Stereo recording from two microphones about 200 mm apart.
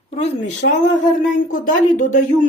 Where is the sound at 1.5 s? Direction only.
40° left (ahead or behind).